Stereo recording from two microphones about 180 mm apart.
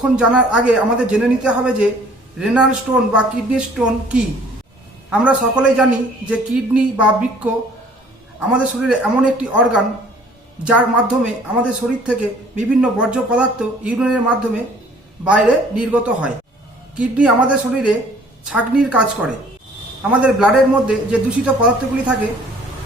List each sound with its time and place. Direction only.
0.2 s a man's voice: 5° right (ahead or behind)